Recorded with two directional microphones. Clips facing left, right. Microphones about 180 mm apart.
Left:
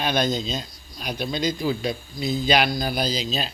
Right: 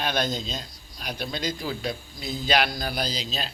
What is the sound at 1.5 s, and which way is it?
Speech, 15° left (ahead or behind).